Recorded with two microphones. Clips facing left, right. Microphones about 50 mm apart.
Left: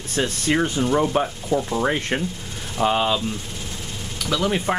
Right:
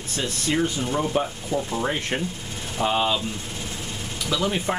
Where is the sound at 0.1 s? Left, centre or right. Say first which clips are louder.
Left 4 dB; left.